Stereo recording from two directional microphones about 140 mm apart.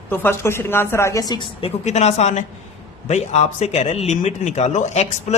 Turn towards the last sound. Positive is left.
turn(degrees=55)  # may be behind; listen again after turning